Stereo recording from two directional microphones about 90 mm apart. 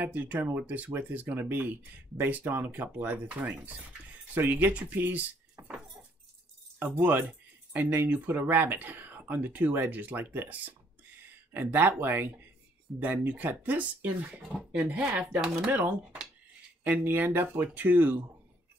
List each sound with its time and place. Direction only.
0.0 s speech: 20° right (ahead or behind)
6.8 s speech: 25° right (ahead or behind)